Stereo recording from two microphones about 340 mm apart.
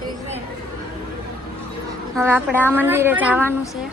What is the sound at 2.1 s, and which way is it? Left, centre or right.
A woman's voice, centre.